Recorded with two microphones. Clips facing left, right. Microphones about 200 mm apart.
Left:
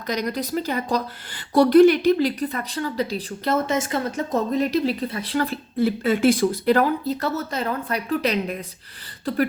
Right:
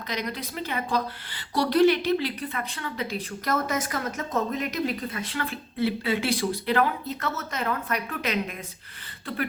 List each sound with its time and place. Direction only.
0.1 s a woman's voice: 45° left (ahead or behind)